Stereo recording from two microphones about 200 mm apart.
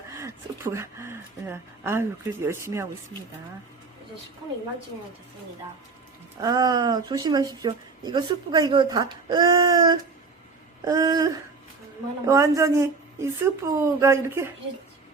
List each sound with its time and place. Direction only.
0.1 s a woman's voice: 15° right (ahead or behind)
6.4 s speech: 20° right (ahead or behind)